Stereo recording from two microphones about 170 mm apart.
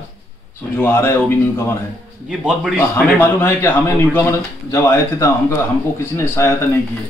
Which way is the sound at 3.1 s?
15° left (ahead or behind).